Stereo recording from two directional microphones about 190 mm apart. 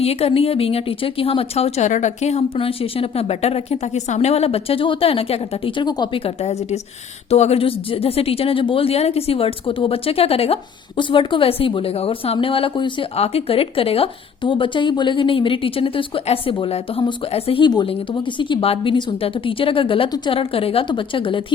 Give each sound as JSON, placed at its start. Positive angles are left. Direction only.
{"t": 0.0, "sound": "a woman's voice", "side_deg": 30}